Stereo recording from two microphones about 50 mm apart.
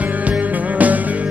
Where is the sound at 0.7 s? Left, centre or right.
Right.